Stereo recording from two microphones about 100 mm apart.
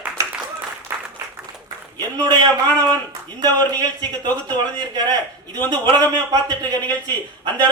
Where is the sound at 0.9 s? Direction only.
20° right (ahead or behind).